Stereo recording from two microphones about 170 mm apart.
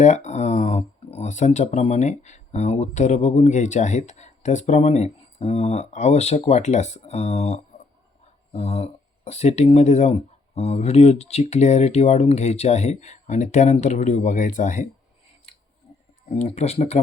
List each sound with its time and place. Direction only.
0.0 s speech: 45° left (ahead or behind)
16.3 s speech: 40° left (ahead or behind)